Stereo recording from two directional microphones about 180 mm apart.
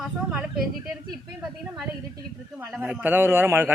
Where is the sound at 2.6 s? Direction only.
5° right (ahead or behind).